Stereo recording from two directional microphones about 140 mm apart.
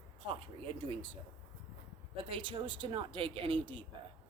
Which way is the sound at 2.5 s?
35° right (ahead or behind).